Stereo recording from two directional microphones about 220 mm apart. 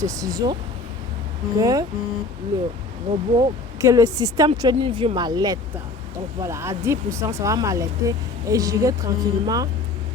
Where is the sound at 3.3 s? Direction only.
15° right (ahead or behind).